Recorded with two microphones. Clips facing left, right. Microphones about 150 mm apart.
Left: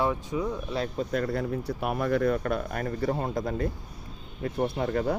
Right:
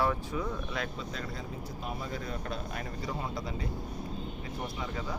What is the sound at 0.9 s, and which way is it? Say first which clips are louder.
Speech: left 11 dB; 55° left (ahead or behind).